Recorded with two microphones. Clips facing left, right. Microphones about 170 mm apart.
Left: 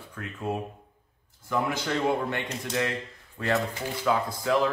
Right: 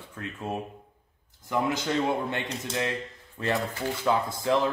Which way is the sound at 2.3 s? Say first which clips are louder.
Even; 20° right (ahead or behind).